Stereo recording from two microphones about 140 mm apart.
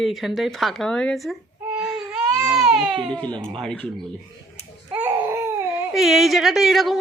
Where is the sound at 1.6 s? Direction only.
5° right (ahead or behind).